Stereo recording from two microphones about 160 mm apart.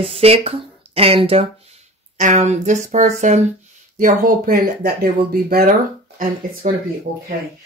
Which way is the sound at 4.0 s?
60° right (ahead or behind).